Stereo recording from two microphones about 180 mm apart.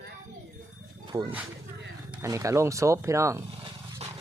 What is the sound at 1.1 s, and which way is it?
Speech, 15° right (ahead or behind).